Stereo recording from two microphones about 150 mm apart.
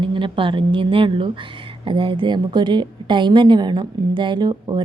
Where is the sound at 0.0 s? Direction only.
35° right (ahead or behind).